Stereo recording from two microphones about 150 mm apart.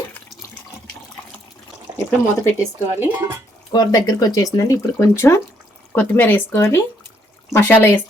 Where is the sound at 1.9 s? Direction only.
25° right (ahead or behind).